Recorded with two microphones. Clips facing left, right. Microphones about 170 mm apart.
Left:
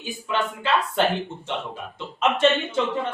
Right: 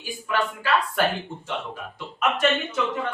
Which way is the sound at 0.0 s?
25° left (ahead or behind).